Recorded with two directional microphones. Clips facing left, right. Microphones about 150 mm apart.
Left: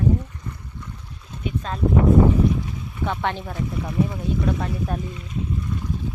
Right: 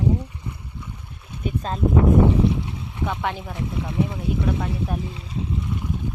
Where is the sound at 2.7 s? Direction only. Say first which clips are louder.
Even; 25° right (ahead or behind).